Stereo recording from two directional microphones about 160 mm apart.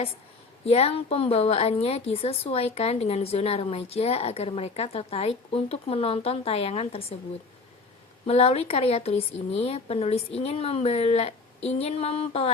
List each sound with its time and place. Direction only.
0.6 s a woman's voice: 40° left (ahead or behind)
8.3 s a woman's voice: 40° left (ahead or behind)